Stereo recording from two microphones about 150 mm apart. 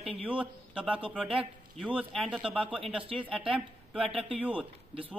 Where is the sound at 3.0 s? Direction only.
35° right (ahead or behind).